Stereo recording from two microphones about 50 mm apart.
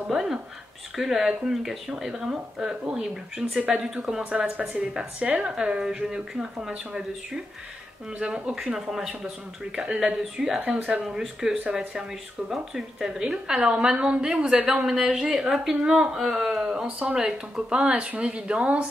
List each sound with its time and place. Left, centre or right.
0.1 s a woman's voice: centre
8.7 s a woman's voice: centre; by 18.9 s right